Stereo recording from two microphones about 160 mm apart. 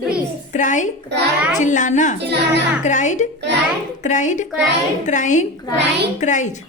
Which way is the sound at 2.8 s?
50° left (ahead or behind).